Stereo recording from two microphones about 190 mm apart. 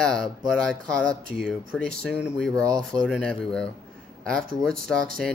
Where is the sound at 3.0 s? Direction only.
5° left (ahead or behind).